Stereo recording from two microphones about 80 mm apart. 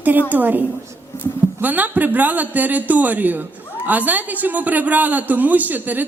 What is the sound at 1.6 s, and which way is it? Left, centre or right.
A man's voice, right.